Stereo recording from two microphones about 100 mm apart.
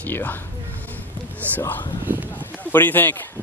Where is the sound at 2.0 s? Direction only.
20° right (ahead or behind).